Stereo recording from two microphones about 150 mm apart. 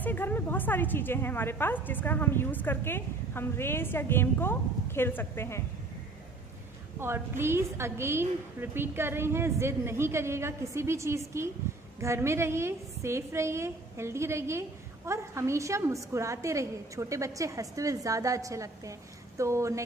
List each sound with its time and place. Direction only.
0.0 s a woman's voice: 10° left (ahead or behind)
7.0 s a woman's voice: 15° right (ahead or behind)